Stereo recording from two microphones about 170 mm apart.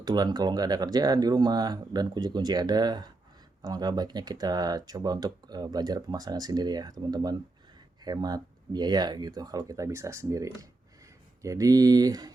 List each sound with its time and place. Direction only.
0.0 s speech: 25° right (ahead or behind)